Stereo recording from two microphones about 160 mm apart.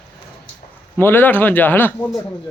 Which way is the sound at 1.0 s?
15° left (ahead or behind).